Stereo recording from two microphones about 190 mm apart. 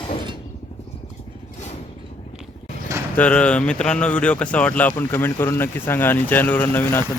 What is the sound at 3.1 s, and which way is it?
Speech, 5° left (ahead or behind).